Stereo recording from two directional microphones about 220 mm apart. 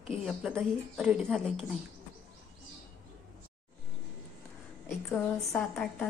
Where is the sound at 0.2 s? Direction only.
5° right (ahead or behind).